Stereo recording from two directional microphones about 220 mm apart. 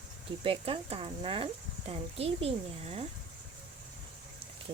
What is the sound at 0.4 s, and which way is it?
Speech, 25° right (ahead or behind).